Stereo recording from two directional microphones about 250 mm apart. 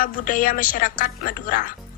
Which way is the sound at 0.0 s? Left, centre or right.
Left.